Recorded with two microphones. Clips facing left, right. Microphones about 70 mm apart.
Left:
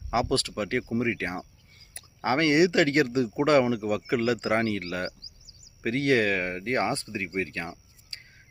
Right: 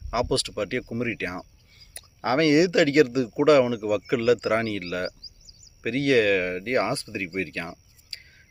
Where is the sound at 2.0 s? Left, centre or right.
Left.